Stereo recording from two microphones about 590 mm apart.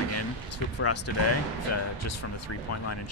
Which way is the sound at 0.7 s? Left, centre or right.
Left.